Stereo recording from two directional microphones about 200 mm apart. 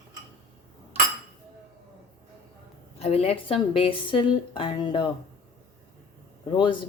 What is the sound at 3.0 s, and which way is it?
Speech, 30° left (ahead or behind).